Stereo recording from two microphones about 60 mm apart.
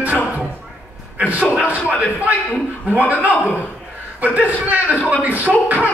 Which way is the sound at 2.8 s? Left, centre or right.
Right.